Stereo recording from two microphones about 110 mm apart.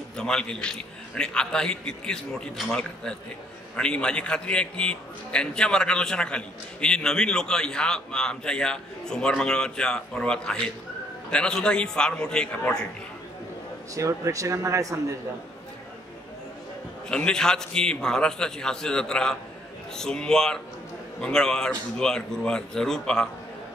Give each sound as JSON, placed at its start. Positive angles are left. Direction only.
{"t": 0.2, "sound": "a man's voice", "side_deg": 5}
{"t": 13.9, "sound": "speech", "side_deg": -30}
{"t": 17.1, "sound": "a man's voice", "side_deg": 5}